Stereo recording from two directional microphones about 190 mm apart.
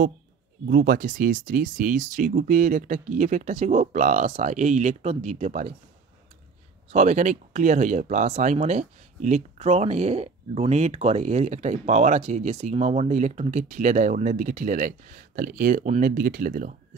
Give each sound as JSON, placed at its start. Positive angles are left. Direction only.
{"t": 0.7, "sound": "speech", "side_deg": -50}
{"t": 6.9, "sound": "speech", "side_deg": -40}